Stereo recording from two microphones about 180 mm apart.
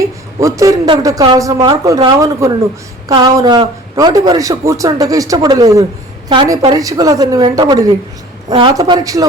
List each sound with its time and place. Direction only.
0.0 s speech: 20° right (ahead or behind)
3.1 s speech: 20° right (ahead or behind)